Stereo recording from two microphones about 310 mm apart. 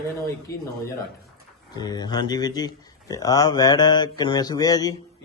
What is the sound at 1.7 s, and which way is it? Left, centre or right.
Speech, centre.